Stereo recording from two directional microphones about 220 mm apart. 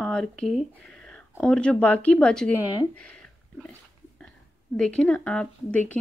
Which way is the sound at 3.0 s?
5° left (ahead or behind).